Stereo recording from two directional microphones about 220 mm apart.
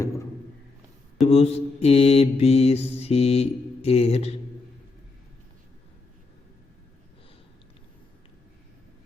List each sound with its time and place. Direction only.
1.3 s mantra: 30° left (ahead or behind)